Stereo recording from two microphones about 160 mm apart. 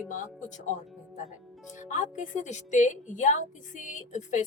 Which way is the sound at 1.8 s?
50° left (ahead or behind).